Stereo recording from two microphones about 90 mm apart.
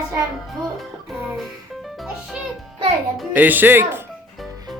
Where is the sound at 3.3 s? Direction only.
20° right (ahead or behind).